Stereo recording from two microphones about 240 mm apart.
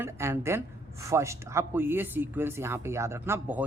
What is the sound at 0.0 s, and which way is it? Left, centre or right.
Speech, centre.